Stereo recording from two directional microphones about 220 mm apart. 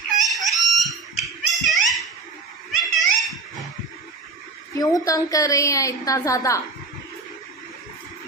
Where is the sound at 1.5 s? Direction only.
Centre (ahead or behind).